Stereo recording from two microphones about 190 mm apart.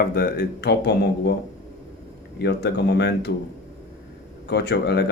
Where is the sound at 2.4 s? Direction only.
60° left (ahead or behind).